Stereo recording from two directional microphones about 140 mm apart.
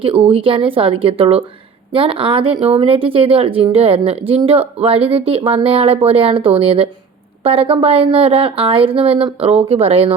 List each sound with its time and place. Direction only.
0.0 s speech: 40° right (ahead or behind)